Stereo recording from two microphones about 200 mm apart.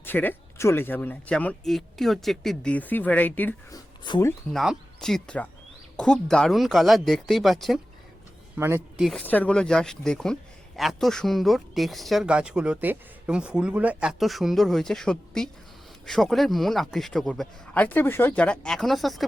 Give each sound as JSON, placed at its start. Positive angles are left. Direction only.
{"t": 0.0, "sound": "speech", "side_deg": 10}
{"t": 4.0, "sound": "speech", "side_deg": 20}
{"t": 4.5, "sound": "speech", "side_deg": 0}
{"t": 8.5, "sound": "speech", "side_deg": -10}
{"t": 9.0, "sound": "speech", "side_deg": 5}